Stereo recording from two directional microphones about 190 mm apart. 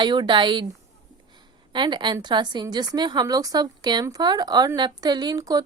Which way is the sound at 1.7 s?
25° right (ahead or behind).